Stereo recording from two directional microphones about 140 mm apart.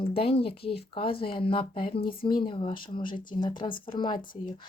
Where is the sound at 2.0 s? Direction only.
90° left.